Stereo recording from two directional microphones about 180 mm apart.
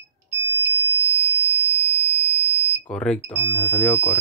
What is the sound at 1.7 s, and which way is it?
Smoke detector, 10° left (ahead or behind).